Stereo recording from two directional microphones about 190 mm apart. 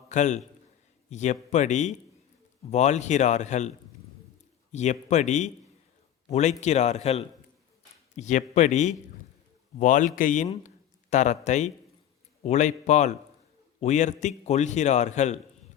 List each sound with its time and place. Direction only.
0.1 s a man's voice: 40° left (ahead or behind)
4.7 s a man's voice: 35° left (ahead or behind)